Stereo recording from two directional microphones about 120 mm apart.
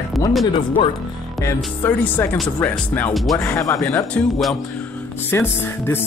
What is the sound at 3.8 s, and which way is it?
Speech, 10° left (ahead or behind).